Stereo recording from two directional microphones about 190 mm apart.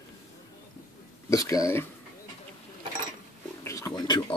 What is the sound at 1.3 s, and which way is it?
Speech, 15° left (ahead or behind).